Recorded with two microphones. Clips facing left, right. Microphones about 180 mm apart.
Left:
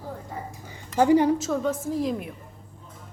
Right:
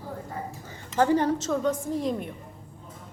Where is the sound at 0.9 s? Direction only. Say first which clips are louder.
Left 4 dB; 15° left (ahead or behind).